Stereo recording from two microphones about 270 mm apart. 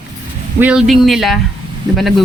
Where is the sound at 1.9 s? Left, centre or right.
Centre.